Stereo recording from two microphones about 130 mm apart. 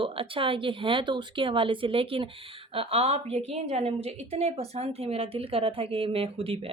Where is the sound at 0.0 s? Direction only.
45° right (ahead or behind).